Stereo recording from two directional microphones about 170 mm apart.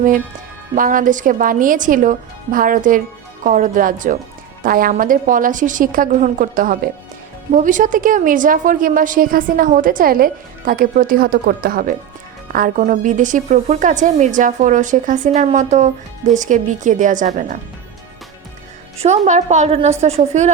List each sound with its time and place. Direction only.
0.8 s a woman's voice: 50° right (ahead or behind)
18.9 s a woman's voice: 40° right (ahead or behind)